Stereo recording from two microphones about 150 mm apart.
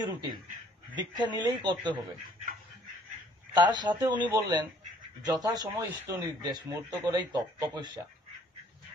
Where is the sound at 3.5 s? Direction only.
30° right (ahead or behind).